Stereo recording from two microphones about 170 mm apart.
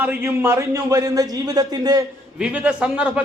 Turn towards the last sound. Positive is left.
turn(degrees=-10)  # may be behind; listen again after turning